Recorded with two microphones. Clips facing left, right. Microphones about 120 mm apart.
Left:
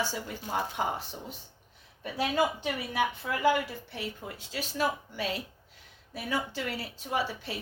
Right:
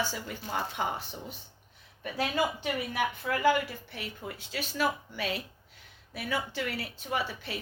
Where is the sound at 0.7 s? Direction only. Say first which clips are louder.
Left 1 dB; 30° left (ahead or behind).